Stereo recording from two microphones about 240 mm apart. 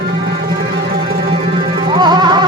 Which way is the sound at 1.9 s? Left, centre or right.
Centre.